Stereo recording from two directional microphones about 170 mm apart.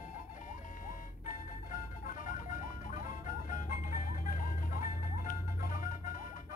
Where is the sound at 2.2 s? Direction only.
50° left (ahead or behind).